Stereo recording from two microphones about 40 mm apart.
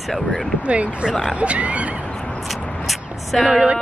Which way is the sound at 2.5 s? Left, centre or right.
Centre.